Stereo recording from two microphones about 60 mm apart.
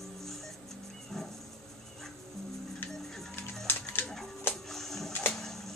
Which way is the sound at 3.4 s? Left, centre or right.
Left.